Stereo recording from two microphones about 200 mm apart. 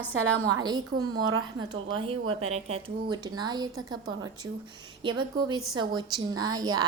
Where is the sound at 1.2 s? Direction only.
90° right.